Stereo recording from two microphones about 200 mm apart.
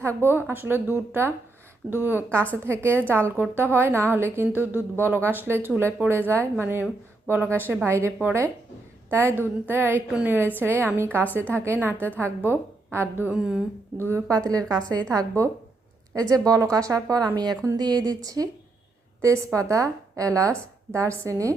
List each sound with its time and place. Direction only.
0.0 s a woman's voice: 10° right (ahead or behind)